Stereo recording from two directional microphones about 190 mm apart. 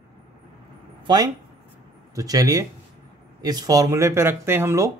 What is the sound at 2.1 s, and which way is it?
Speech, 20° right (ahead or behind).